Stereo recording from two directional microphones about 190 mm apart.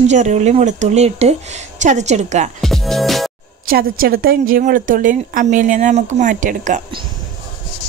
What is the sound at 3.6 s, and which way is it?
A woman's voice, 50° right (ahead or behind).